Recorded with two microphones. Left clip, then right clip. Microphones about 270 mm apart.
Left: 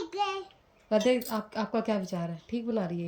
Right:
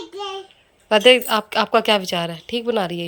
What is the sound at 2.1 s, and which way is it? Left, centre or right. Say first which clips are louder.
Speech: right 13 dB; right.